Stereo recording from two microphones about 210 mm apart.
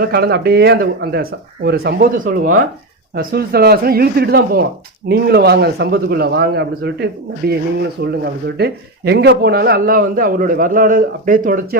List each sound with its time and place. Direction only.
0.0 s a man's voice: 45° right (ahead or behind)